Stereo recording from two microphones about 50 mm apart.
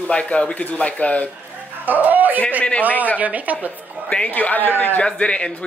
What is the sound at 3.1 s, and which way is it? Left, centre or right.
Speech, right.